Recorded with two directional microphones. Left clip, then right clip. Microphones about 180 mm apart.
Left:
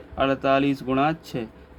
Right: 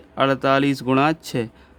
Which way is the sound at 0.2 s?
60° right (ahead or behind).